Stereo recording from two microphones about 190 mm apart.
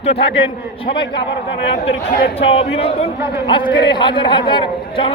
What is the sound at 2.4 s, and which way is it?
A man's voice, 30° left (ahead or behind).